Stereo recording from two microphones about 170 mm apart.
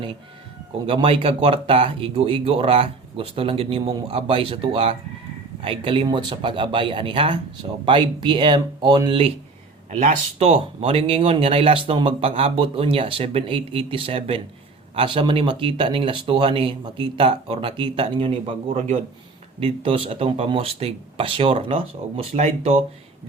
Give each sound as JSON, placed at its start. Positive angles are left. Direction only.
{"t": 0.9, "sound": "speech", "side_deg": -30}
{"t": 10.3, "sound": "speech", "side_deg": -35}